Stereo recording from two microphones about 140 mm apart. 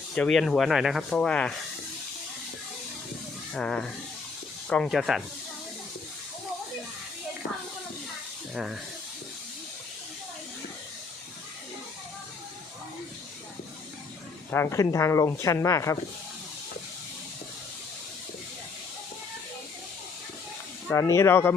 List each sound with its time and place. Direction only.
0.1 s speech: 5° left (ahead or behind)
3.5 s speech: 5° left (ahead or behind)
8.5 s speech: 5° right (ahead or behind)
14.5 s speech: 20° left (ahead or behind)
20.9 s speech: 20° left (ahead or behind)